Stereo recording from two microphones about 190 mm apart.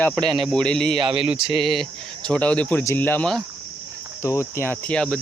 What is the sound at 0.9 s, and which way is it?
Speech, 25° right (ahead or behind).